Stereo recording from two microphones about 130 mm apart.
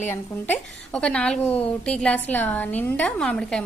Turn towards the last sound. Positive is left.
turn(degrees=5)  # may be behind; listen again after turning